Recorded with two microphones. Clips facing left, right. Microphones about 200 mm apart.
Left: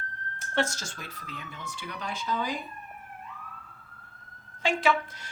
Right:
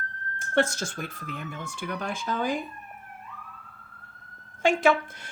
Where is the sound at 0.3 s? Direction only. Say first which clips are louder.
Right 5 dB; 55° right (ahead or behind).